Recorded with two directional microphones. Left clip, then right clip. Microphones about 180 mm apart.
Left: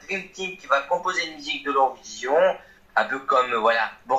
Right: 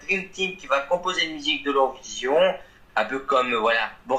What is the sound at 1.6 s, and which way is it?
Speech, 35° right (ahead or behind).